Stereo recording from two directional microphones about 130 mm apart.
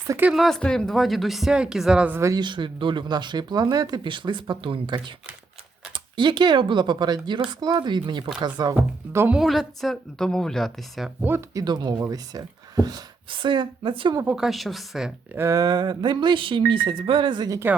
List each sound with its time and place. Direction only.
0.2 s speech: 10° right (ahead or behind)
0.4 s speech: 5° left (ahead or behind)
2.2 s speech: 30° right (ahead or behind)
8.7 s speech: 15° right (ahead or behind)
9.4 s speech: centre (ahead or behind)
11.2 s speech: 20° right (ahead or behind)
11.6 s speech: 35° right (ahead or behind)
14.3 s speech: centre (ahead or behind)
15.4 s speech: 25° right (ahead or behind)